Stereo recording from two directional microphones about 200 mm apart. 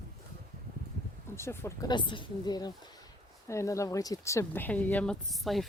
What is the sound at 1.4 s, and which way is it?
Speech, 15° left (ahead or behind).